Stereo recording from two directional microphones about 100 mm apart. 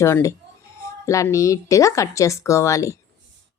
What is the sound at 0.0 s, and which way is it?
A woman's voice, 30° left (ahead or behind).